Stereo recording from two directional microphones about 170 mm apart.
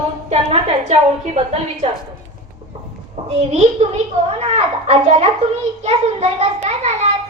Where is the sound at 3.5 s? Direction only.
40° right (ahead or behind).